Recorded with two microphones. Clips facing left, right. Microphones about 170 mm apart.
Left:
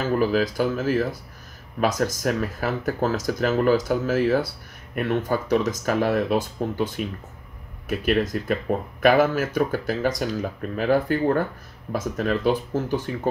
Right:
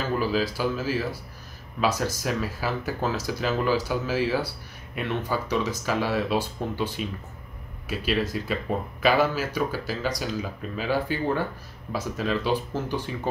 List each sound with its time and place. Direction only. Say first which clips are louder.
0.2 s speech: left 4 dB; 50° left (ahead or behind)